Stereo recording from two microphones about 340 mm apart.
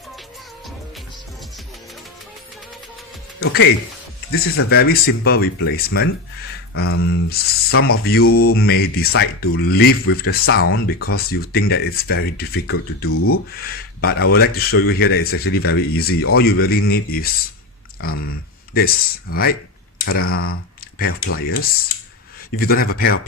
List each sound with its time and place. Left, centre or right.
3.4 s speech: left
6.7 s speech: left
13.7 s speech: left
22.5 s speech: left